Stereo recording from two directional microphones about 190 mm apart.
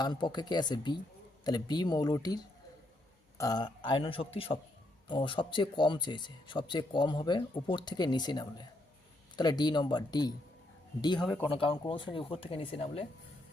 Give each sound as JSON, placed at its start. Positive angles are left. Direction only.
{"t": 0.0, "sound": "speech", "side_deg": 25}